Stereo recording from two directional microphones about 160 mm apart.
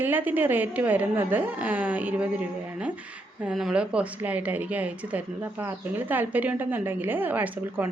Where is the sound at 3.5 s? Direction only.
Centre (ahead or behind).